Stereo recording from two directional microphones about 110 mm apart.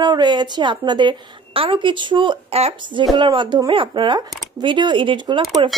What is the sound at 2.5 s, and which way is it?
Speech, 70° right (ahead or behind).